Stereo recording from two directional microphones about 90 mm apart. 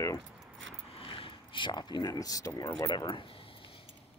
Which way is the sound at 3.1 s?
80° left.